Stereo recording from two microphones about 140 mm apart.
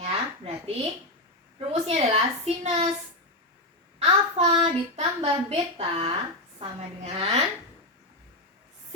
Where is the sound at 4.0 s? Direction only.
45° right (ahead or behind).